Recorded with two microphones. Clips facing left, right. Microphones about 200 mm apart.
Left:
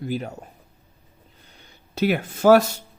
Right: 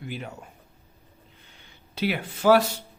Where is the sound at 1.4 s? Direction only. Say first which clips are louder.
Left 2 dB; 40° left (ahead or behind).